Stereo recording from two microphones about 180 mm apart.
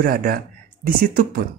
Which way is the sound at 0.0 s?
55° right (ahead or behind).